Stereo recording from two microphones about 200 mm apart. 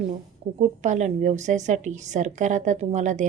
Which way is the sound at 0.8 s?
35° right (ahead or behind).